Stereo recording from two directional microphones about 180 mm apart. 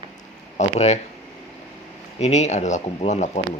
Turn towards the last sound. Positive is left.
turn(degrees=40)  # may be behind; listen again after turning